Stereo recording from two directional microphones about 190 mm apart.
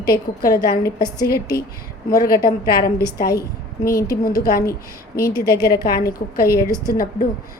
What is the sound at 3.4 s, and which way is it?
A woman's voice, 50° left (ahead or behind).